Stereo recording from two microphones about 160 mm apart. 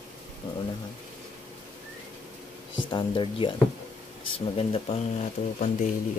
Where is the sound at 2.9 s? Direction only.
30° left (ahead or behind).